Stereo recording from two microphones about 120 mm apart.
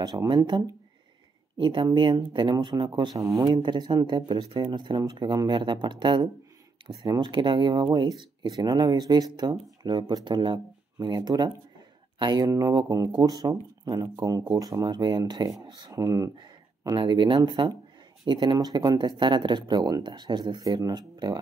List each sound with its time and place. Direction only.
0.0 s speech: 35° right (ahead or behind)
3.2 s speech: 25° right (ahead or behind)
3.4 s speech: 40° right (ahead or behind); by 16.3 s 25° right (ahead or behind)
16.8 s speech: 40° right (ahead or behind)